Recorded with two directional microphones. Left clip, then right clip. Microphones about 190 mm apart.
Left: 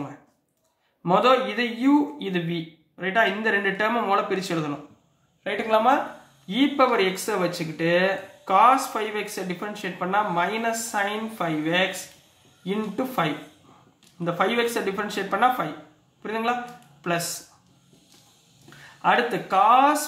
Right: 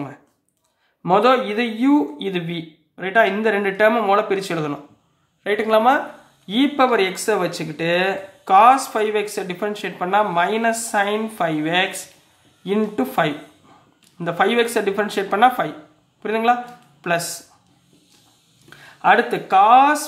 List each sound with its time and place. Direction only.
1.0 s speech: 35° right (ahead or behind)
18.9 s speech: 35° right (ahead or behind)